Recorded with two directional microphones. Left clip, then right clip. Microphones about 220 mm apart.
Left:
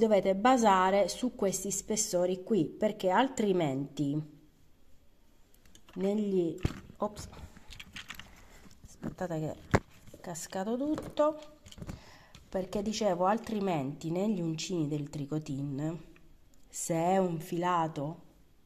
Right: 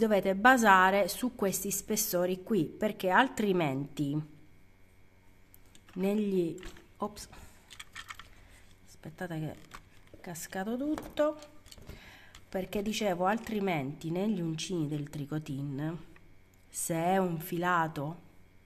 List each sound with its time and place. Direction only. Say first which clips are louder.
0.0 s a woman's voice: right 1 dB; 15° right (ahead or behind)
5.9 s a woman's voice: even; 15° right (ahead or behind)
7.0 s a sound: left 2 dB; 15° right (ahead or behind)
9.1 s a woman's voice: left 3 dB; centre (ahead or behind)